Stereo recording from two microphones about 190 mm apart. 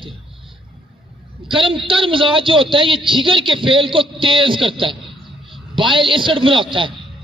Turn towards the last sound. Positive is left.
turn(degrees=-25)  # may be behind; listen again after turning